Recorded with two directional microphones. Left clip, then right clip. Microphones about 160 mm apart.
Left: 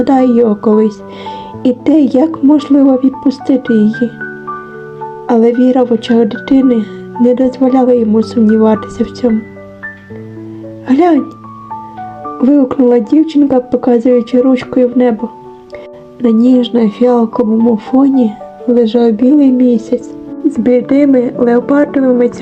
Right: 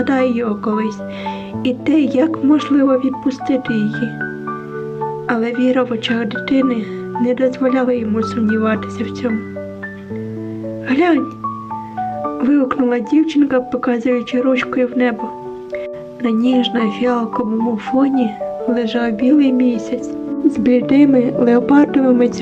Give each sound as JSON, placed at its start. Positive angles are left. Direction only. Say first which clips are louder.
{"t": 0.0, "sound": "speech", "louder": "left 8 dB", "side_deg": 35}
{"t": 5.3, "sound": "speech", "louder": "left 9 dB", "side_deg": 35}
{"t": 10.8, "sound": "speech", "louder": "left 6 dB", "side_deg": 35}
{"t": 12.4, "sound": "speech", "louder": "left 7 dB", "side_deg": 30}
{"t": 16.2, "sound": "speech", "louder": "left 6 dB", "side_deg": 30}
{"t": 20.5, "sound": "speech", "louder": "left 5 dB", "side_deg": 0}